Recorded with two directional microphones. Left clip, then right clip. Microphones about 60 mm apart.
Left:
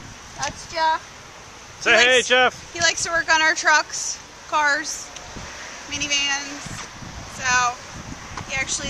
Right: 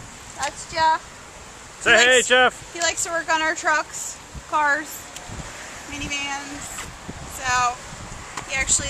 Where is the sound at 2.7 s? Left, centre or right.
Left.